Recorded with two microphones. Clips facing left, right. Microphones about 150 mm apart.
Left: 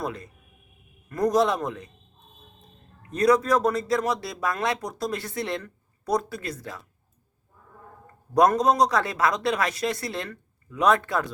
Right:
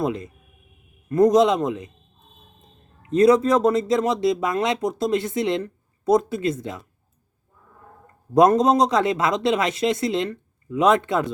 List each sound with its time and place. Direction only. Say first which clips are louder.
0.0 s speech: right 7 dB; 20° right (ahead or behind)
3.0 s speech: right 5 dB; 25° right (ahead or behind)
8.3 s speech: right 4 dB; 25° right (ahead or behind)